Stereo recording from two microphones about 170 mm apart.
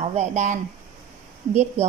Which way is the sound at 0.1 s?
45° right (ahead or behind).